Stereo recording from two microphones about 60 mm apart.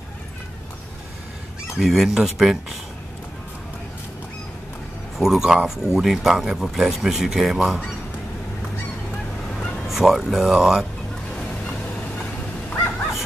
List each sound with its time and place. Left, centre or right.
1.8 s speech: centre
5.2 s speech: centre
9.5 s a sound: centre
9.8 s speech: centre